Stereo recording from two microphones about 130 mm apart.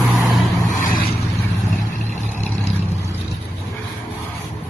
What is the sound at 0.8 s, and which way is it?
Vehicle, 90° left.